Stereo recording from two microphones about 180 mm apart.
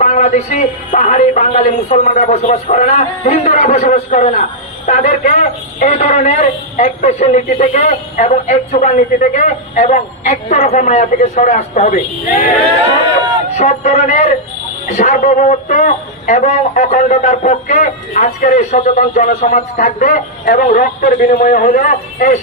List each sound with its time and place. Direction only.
0.0 s speech: 40° left (ahead or behind)
13.6 s speech: 40° left (ahead or behind)